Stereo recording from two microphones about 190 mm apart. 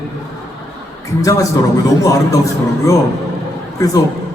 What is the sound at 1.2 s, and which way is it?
A man's voice, 15° left (ahead or behind).